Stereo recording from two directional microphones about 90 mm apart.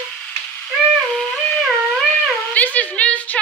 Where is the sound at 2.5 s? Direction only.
15° left (ahead or behind).